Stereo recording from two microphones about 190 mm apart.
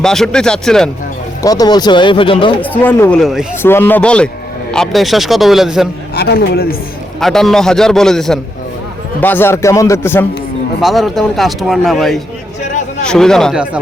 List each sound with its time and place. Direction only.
0.0 s speech: 5° left (ahead or behind)
1.4 s speech: 20° left (ahead or behind)
2.6 s a man's voice: 10° left (ahead or behind)
3.6 s a man's voice: 10° left (ahead or behind)
6.1 s speech: 55° left (ahead or behind)
7.2 s a man's voice: centre (ahead or behind)
10.8 s speech: centre (ahead or behind)